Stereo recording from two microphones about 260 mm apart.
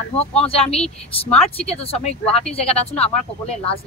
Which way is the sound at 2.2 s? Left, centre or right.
Centre.